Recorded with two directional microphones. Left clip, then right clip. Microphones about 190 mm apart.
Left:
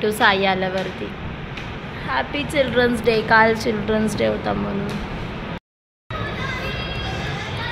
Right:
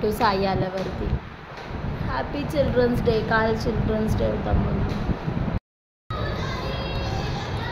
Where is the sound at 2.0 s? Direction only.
5° left (ahead or behind).